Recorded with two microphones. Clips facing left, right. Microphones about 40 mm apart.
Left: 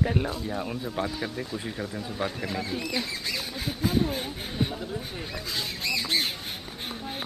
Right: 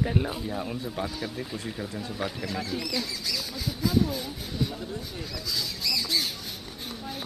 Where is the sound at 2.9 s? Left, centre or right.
Left.